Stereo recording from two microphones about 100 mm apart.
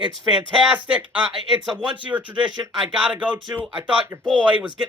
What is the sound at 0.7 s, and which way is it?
Speech, 15° right (ahead or behind).